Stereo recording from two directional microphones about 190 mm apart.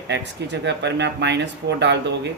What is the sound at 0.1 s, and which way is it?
Speech, 65° right (ahead or behind).